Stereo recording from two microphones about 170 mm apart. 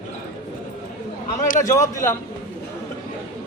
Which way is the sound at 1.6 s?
20° left (ahead or behind).